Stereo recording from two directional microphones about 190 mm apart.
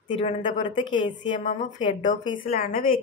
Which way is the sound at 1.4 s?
40° left (ahead or behind).